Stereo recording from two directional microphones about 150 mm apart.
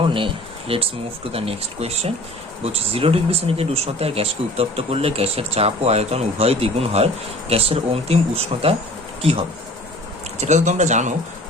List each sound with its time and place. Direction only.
0.7 s speech: 40° right (ahead or behind)
10.4 s speech: 50° right (ahead or behind)